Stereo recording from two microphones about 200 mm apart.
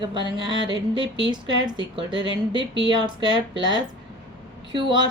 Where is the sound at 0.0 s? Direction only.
25° right (ahead or behind).